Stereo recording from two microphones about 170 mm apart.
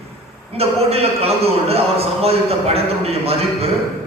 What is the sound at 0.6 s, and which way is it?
A man's voice, 35° right (ahead or behind).